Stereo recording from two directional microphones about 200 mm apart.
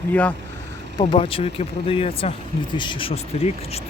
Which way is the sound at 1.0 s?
25° left (ahead or behind).